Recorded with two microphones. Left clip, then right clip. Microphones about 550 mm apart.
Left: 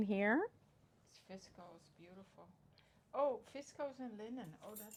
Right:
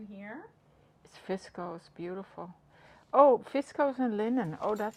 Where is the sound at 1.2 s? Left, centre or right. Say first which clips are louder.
Right 19 dB; right.